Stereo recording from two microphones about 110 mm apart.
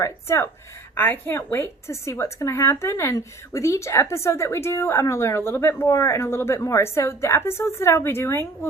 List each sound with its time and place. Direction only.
0.0 s a woman's voice: 25° left (ahead or behind)